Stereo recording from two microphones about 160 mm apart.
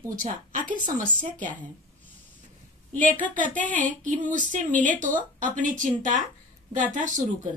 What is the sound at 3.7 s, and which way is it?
Speech, 55° right (ahead or behind).